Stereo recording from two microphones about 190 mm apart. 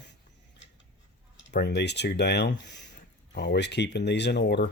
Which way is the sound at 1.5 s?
55° left (ahead or behind).